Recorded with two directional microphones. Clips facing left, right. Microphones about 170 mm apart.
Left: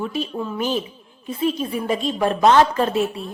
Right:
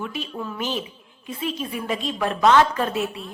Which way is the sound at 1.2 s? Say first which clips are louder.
Left 6 dB; 40° left (ahead or behind).